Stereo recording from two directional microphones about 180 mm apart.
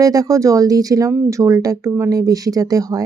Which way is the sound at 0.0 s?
20° right (ahead or behind).